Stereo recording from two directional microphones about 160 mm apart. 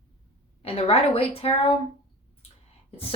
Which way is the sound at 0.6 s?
35° left (ahead or behind).